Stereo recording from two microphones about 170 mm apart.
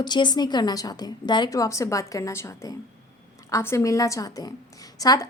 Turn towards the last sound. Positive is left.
turn(degrees=20)  # may be behind; listen again after turning